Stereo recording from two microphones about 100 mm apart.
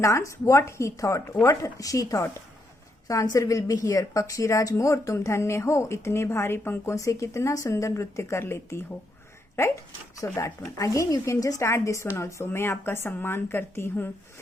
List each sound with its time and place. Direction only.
0.0 s a woman's voice: 30° left (ahead or behind)